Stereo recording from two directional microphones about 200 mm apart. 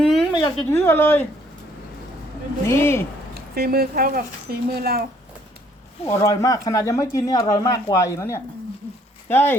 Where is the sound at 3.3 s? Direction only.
50° right (ahead or behind).